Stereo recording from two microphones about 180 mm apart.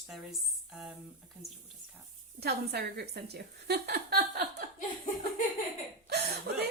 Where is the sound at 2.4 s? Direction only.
60° right (ahead or behind).